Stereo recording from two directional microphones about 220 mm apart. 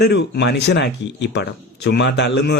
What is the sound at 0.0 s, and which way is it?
A man's voice, 50° left (ahead or behind).